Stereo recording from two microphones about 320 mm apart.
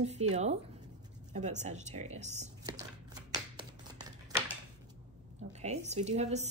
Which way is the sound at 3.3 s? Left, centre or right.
Centre.